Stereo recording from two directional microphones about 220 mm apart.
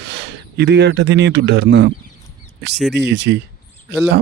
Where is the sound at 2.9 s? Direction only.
50° right (ahead or behind).